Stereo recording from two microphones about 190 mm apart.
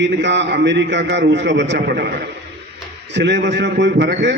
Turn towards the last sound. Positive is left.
turn(degrees=-65)  # may be behind; listen again after turning